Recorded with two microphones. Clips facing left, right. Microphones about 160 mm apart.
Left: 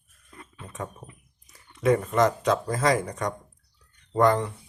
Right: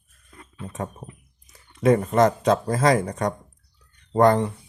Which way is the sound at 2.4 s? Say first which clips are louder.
Right 4 dB; 30° right (ahead or behind).